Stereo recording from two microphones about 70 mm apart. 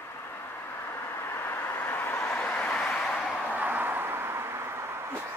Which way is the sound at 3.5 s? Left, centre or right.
Right.